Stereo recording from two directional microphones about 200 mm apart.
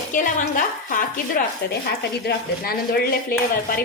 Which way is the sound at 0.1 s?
40° left (ahead or behind).